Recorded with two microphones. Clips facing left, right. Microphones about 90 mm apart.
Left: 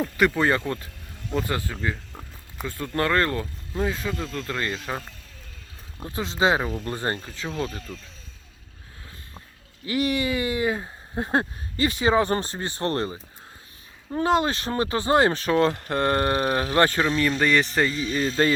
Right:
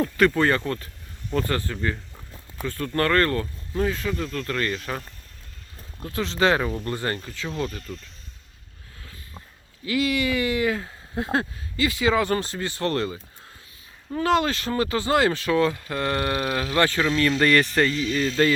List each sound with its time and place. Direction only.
0.3 s speech: 15° left (ahead or behind)
9.8 s speech: 30° left (ahead or behind)
15.9 s speech: 40° left (ahead or behind)
17.2 s speech: 5° left (ahead or behind)
17.9 s speech: 25° left (ahead or behind)